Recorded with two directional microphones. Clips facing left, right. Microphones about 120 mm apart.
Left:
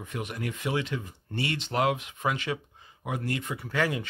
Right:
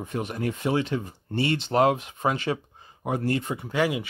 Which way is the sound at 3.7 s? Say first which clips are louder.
Right 3 dB; 15° right (ahead or behind).